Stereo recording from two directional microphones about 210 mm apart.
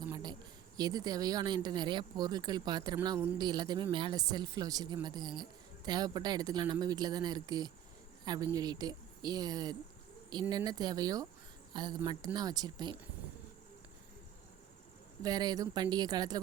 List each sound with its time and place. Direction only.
0.1 s a sound: 20° right (ahead or behind)
0.8 s speech: 20° right (ahead or behind)
15.2 s speech: 20° right (ahead or behind)